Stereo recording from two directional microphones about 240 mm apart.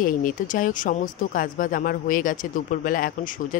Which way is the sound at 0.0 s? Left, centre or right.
Left.